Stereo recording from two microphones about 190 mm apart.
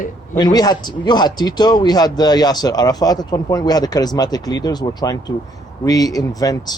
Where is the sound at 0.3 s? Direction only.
20° left (ahead or behind).